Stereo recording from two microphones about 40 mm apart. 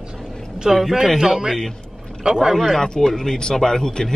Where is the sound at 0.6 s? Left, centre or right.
Centre.